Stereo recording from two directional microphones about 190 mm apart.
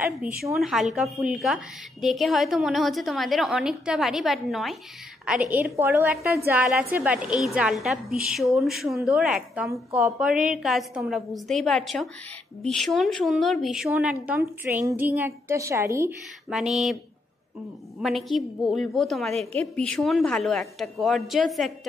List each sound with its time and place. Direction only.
0.0 s a woman's voice: 10° right (ahead or behind)
9.7 s a woman's voice: 15° right (ahead or behind)
10.1 s a woman's voice: 5° right (ahead or behind)
16.4 s a woman's voice: centre (ahead or behind)
18.0 s a woman's voice: centre (ahead or behind)